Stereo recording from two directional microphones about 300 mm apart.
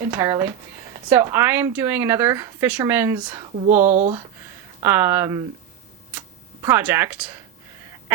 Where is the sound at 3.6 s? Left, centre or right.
Right.